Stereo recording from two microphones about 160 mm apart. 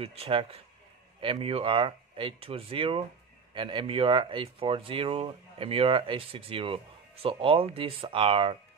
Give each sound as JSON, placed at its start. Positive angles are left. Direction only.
{"t": 0.0, "sound": "speech", "side_deg": -35}